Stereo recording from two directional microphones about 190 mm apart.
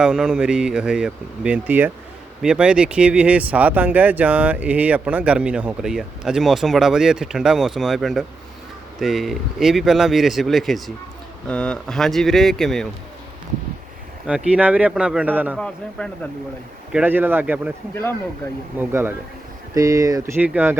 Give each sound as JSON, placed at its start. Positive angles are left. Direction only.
{"t": 0.0, "sound": "speech", "side_deg": -5}
{"t": 14.3, "sound": "speech", "side_deg": -5}
{"t": 15.5, "sound": "speech", "side_deg": 5}
{"t": 16.9, "sound": "speech", "side_deg": -10}
{"t": 17.9, "sound": "speech", "side_deg": 10}
{"t": 18.8, "sound": "speech", "side_deg": -10}